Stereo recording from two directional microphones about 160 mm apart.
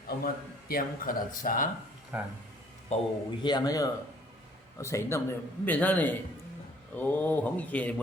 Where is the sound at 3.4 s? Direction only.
25° left (ahead or behind).